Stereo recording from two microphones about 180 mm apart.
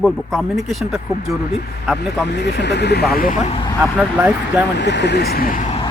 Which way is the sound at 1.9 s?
70° left (ahead or behind).